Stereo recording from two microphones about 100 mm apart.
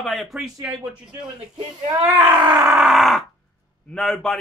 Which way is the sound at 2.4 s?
45° right (ahead or behind).